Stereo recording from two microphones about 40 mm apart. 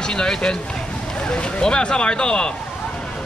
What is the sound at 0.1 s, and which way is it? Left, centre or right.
Speech, left.